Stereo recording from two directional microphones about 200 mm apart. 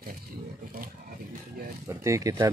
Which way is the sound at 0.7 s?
45° right (ahead or behind).